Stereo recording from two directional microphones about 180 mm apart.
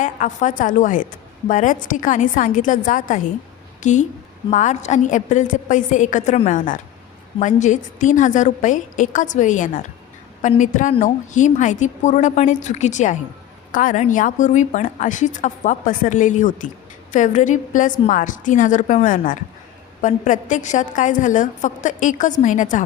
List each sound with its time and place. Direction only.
0.0 s a woman's voice: 45° left (ahead or behind)